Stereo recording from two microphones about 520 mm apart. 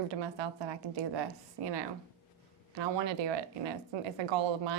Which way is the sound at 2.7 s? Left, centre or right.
Right.